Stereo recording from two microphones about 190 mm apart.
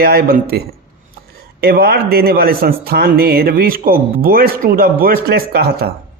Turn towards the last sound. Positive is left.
turn(degrees=-55)  # may be behind; listen again after turning